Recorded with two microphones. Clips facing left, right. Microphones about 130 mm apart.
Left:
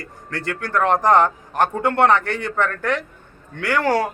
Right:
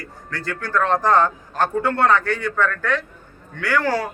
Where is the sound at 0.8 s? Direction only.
20° left (ahead or behind).